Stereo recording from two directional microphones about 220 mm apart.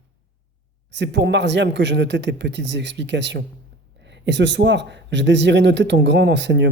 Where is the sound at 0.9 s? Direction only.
55° right (ahead or behind).